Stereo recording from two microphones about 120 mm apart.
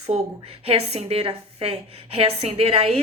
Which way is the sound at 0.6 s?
55° right (ahead or behind).